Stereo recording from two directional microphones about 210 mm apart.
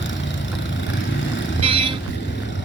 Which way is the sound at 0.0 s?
60° left (ahead or behind).